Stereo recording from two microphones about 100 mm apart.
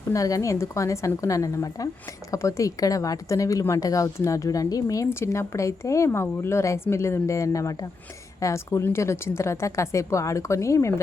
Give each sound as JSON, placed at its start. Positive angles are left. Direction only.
{"t": 0.1, "sound": "a woman's voice", "side_deg": 35}